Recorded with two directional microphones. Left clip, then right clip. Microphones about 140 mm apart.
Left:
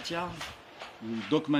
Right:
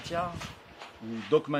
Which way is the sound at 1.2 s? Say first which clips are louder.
Right 2 dB; 55° right (ahead or behind).